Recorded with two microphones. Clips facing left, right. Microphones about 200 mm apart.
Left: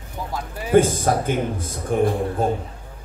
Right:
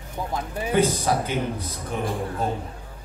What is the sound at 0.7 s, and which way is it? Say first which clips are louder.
Speech: left 5 dB; 50° left (ahead or behind).